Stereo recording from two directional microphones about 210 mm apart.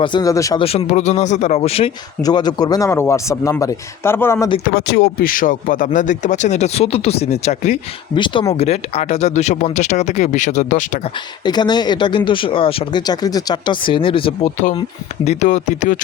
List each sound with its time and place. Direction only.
0.0 s a man's voice: 20° left (ahead or behind)
0.6 s a man's voice: 30° left (ahead or behind)
4.6 s speech: 50° left (ahead or behind)
11.4 s speech: 20° left (ahead or behind); by 16.0 s 35° left (ahead or behind)